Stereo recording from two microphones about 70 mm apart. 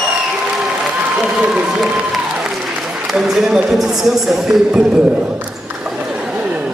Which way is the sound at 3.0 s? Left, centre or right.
Centre.